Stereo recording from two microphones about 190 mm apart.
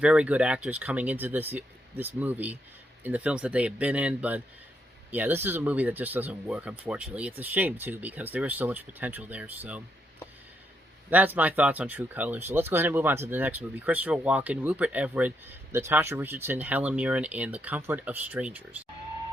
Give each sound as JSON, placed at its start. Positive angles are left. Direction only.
{"t": 0.0, "sound": "speech", "side_deg": -5}
{"t": 11.1, "sound": "speech", "side_deg": -10}